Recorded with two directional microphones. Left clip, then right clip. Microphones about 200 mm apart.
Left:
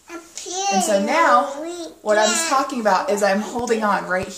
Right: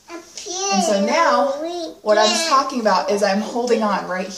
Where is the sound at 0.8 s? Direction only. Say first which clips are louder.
Even; 10° left (ahead or behind).